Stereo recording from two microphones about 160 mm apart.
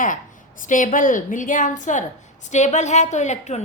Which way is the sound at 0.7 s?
55° left (ahead or behind).